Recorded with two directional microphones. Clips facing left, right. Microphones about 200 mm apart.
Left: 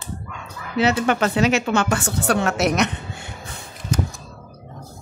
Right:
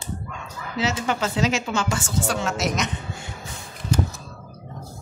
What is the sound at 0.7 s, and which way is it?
A woman's voice, 60° left (ahead or behind).